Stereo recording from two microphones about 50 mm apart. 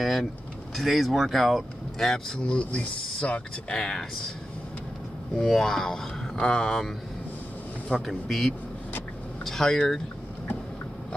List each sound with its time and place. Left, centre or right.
0.0 s speech: centre
2.5 s speech: left
3.7 s speech: centre
5.3 s speech: centre
8.0 s speech: centre
9.4 s vehicle: centre